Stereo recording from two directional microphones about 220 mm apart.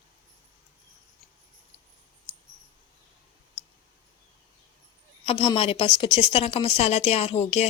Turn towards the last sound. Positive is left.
turn(degrees=30)  # may be behind; listen again after turning